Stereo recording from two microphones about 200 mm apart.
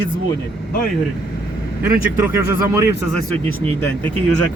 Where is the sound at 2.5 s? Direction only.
15° right (ahead or behind).